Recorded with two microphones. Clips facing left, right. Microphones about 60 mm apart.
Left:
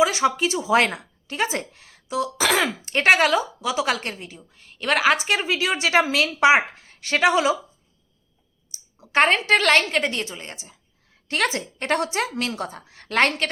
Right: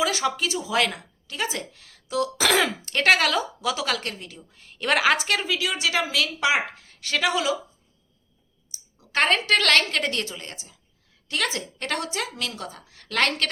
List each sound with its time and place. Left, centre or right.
0.0 s a woman's voice: centre
0.5 s a woman's voice: left
1.8 s a sound: centre
2.1 s a woman's voice: centre
2.8 s a woman's voice: centre
3.6 s a woman's voice: centre
3.8 s a woman's voice: left
4.3 s a woman's voice: centre
5.4 s a woman's voice: left
9.0 s a woman's voice: left
11.3 s a woman's voice: left